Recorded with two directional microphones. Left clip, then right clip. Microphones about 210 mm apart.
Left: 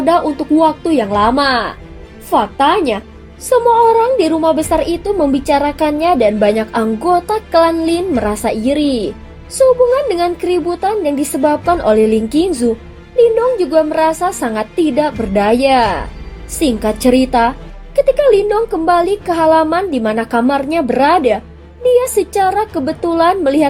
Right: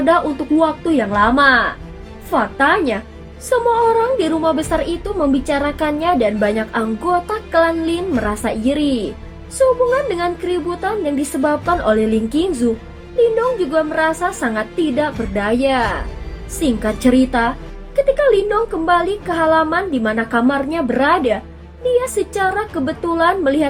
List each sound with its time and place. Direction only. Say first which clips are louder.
0.0 s a woman's voice: left 2 dB; 25° left (ahead or behind)
13.7 s a woman's voice: left 4 dB; 30° left (ahead or behind)